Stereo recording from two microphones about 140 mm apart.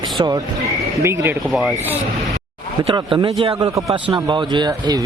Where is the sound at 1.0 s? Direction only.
20° right (ahead or behind).